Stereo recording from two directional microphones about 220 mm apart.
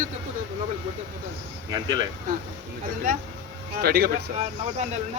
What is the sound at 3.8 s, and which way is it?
Speech, 45° right (ahead or behind).